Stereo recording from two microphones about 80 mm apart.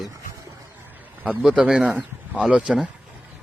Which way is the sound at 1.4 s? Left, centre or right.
Centre.